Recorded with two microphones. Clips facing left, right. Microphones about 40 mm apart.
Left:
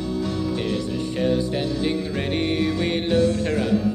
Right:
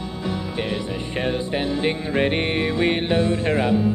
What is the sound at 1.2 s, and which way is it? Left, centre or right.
Music, right.